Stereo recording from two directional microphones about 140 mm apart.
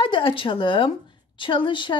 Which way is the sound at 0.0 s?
35° left (ahead or behind).